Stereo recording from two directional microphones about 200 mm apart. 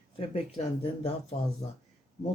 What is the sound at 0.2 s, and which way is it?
Speech, 30° left (ahead or behind).